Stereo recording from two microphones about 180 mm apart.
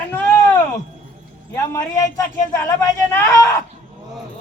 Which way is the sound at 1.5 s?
15° left (ahead or behind).